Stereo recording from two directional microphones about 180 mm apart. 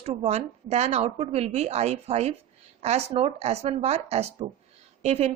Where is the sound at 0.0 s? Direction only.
35° right (ahead or behind).